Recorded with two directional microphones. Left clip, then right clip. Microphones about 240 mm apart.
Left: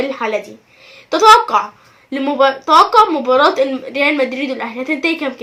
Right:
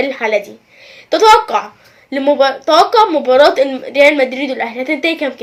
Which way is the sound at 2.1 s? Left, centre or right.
Centre.